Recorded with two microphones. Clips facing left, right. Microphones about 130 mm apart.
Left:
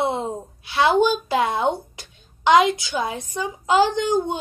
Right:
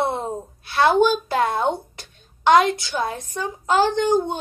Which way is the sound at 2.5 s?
15° left (ahead or behind).